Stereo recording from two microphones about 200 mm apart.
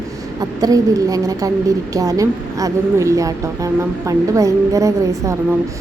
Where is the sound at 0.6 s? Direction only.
15° right (ahead or behind).